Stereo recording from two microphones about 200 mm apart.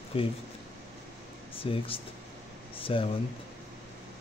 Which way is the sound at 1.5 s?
25° left (ahead or behind).